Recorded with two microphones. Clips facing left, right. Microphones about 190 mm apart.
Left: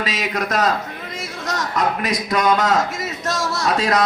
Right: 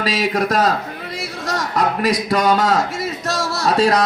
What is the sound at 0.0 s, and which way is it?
A man's voice, 35° right (ahead or behind).